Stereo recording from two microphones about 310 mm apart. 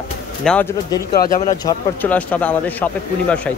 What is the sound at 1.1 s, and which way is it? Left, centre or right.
Speech, left.